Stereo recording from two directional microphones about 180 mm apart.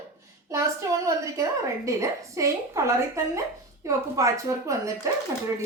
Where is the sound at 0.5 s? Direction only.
15° right (ahead or behind).